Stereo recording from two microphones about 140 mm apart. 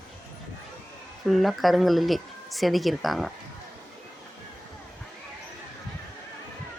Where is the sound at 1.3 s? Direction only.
Centre (ahead or behind).